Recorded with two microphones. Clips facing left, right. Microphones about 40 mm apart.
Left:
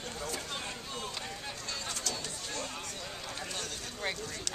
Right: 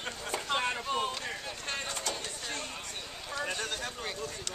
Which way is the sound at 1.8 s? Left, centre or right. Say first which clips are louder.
Right 2 dB; right.